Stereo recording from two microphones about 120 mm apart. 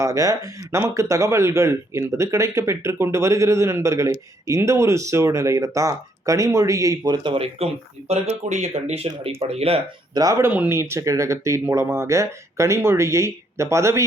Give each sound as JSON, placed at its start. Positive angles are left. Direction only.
{"t": 0.0, "sound": "speech", "side_deg": -25}
{"t": 7.3, "sound": "speech", "side_deg": -55}
{"t": 9.0, "sound": "speech", "side_deg": -50}
{"t": 10.2, "sound": "speech", "side_deg": -25}